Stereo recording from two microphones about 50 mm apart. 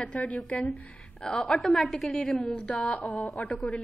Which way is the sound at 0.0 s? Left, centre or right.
Left.